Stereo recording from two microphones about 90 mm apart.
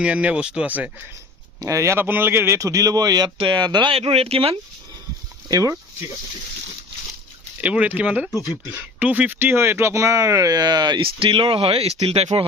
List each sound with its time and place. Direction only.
0.0 s speech: 15° right (ahead or behind)
1.6 s speech: 35° right (ahead or behind)
2.0 s speech: 25° right (ahead or behind); by 3.2 s 45° right (ahead or behind)
3.2 s speech: 65° right (ahead or behind); by 4.5 s 90° right
5.5 s speech: 40° right (ahead or behind)
7.6 s speech: 15° right (ahead or behind); by 12.5 s 90° right